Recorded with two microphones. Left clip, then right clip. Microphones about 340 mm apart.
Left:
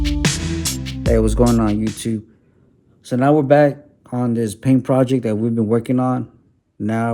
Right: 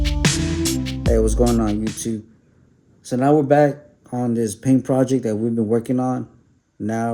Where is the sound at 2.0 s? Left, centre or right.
Left.